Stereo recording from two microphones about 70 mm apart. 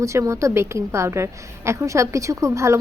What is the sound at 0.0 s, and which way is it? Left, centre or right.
A woman's voice, right.